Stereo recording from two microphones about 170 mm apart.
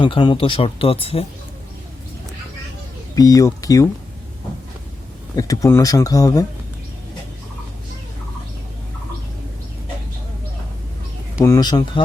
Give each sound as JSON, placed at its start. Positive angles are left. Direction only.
{"t": 0.0, "sound": "speech", "side_deg": 30}
{"t": 3.2, "sound": "speech", "side_deg": 20}
{"t": 5.4, "sound": "speech", "side_deg": 20}
{"t": 11.3, "sound": "speech", "side_deg": 20}